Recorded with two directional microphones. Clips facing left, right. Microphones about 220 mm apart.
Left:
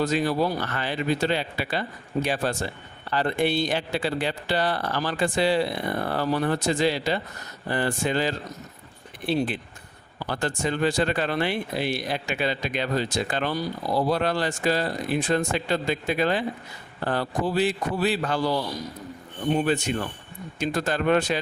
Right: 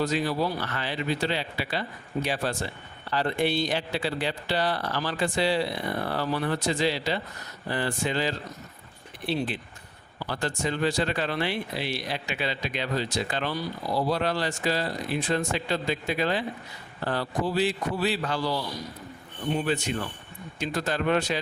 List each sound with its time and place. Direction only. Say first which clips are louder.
0.0 s speech: left 3 dB; 50° left (ahead or behind)
19.5 s speech: left 3 dB; 45° left (ahead or behind)